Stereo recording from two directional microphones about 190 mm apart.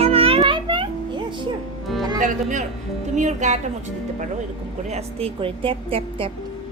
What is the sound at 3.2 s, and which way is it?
Speech, 40° right (ahead or behind).